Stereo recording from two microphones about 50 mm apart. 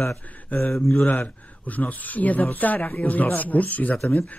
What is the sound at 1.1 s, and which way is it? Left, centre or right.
Speech, left.